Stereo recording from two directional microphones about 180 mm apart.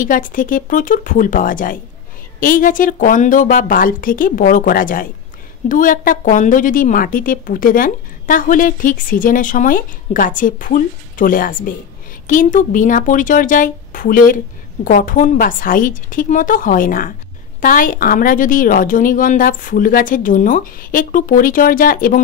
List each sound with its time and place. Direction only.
0.0 s a woman's voice: 50° left (ahead or behind)